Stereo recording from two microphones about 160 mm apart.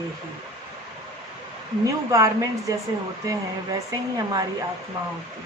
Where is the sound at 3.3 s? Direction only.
25° right (ahead or behind).